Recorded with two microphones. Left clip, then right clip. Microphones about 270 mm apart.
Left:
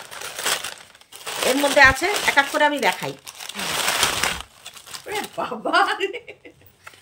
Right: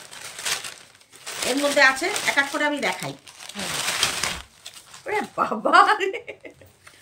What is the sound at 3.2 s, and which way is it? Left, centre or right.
Crumpling, centre.